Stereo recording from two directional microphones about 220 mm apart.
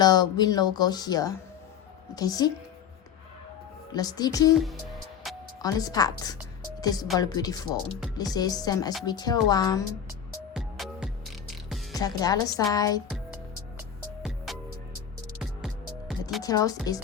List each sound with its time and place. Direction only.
0.0 s speech: 20° left (ahead or behind)
3.9 s speech: 15° left (ahead or behind)
4.5 s speech: centre (ahead or behind)
5.2 s music: centre (ahead or behind)
5.6 s speech: 15° left (ahead or behind)
10.5 s music: centre (ahead or behind)
11.9 s speech: 15° left (ahead or behind)
13.1 s music: 5° right (ahead or behind)
16.4 s speech: 15° left (ahead or behind)